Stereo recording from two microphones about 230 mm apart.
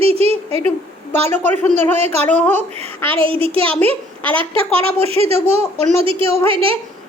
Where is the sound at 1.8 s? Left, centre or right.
Right.